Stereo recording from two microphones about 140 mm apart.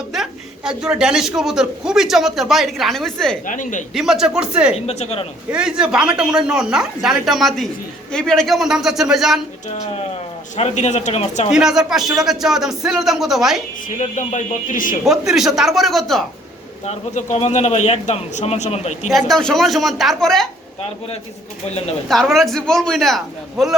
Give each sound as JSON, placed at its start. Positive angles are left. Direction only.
{"t": 0.1, "sound": "a man's voice", "side_deg": -5}
{"t": 3.4, "sound": "speech", "side_deg": 65}
{"t": 3.9, "sound": "a man's voice", "side_deg": -5}
{"t": 4.7, "sound": "a man's voice", "side_deg": 50}
{"t": 5.5, "sound": "a man's voice", "side_deg": -5}
{"t": 9.6, "sound": "a man's voice", "side_deg": 50}
{"t": 11.5, "sound": "a man's voice", "side_deg": -5}
{"t": 13.8, "sound": "speech", "side_deg": 65}
{"t": 15.0, "sound": "a man's voice", "side_deg": -5}
{"t": 16.8, "sound": "a man's voice", "side_deg": 50}
{"t": 19.1, "sound": "a man's voice", "side_deg": 0}
{"t": 22.1, "sound": "a man's voice", "side_deg": 0}